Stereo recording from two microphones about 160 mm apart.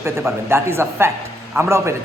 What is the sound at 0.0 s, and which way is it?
A man's voice, 15° right (ahead or behind).